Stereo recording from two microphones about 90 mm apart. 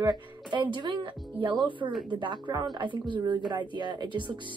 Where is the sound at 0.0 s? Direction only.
55° right (ahead or behind).